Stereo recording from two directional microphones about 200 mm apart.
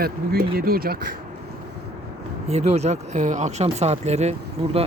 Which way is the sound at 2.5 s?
35° right (ahead or behind).